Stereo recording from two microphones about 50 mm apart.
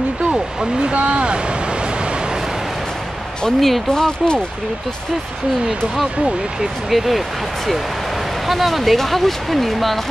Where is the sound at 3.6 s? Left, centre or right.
Centre.